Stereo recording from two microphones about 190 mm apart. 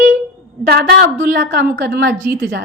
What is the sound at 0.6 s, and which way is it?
Speech, 50° right (ahead or behind).